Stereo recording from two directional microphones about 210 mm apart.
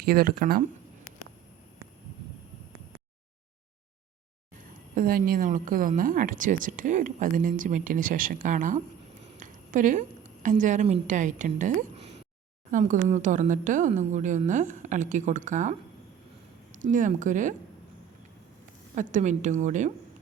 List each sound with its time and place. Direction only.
0.0 s speech: 45° right (ahead or behind)
4.9 s a woman's voice: 45° right (ahead or behind)
9.4 s a sound: 40° right (ahead or behind)
10.4 s a woman's voice: 35° right (ahead or behind)
16.7 s a woman's voice: 40° right (ahead or behind)
18.9 s a woman's voice: 35° right (ahead or behind)